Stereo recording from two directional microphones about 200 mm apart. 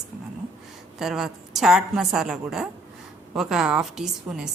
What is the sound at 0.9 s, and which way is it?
A woman's voice, centre (ahead or behind).